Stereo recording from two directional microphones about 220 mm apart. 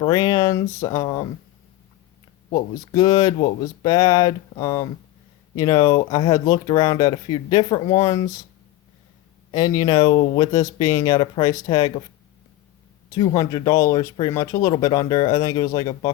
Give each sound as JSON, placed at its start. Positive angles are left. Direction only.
{"t": 0.0, "sound": "speech", "side_deg": 15}
{"t": 2.9, "sound": "speech", "side_deg": 20}
{"t": 9.5, "sound": "speech", "side_deg": 15}
{"t": 13.1, "sound": "speech", "side_deg": 15}